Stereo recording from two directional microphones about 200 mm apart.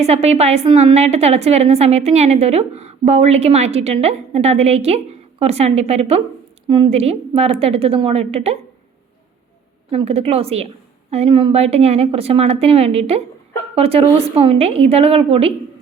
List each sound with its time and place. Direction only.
0.0 s a woman's voice: 30° right (ahead or behind)
9.9 s a woman's voice: 30° right (ahead or behind)